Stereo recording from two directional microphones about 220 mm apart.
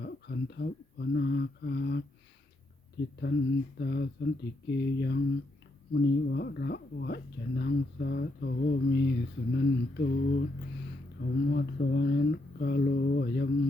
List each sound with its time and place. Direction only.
0.0 s speech: 50° left (ahead or behind)